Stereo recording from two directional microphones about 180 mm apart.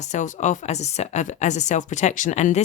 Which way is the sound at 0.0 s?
40° left (ahead or behind).